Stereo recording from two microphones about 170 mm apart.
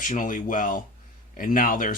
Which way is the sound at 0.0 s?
50° left (ahead or behind).